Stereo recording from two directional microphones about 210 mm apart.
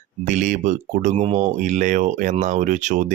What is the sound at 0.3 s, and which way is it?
Speech, 35° right (ahead or behind).